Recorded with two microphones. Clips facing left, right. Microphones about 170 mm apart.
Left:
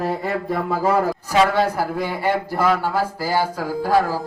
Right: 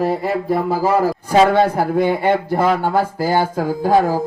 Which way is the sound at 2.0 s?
25° right (ahead or behind).